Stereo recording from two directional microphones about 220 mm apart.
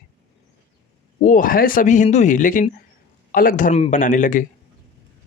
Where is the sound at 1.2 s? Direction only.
35° left (ahead or behind).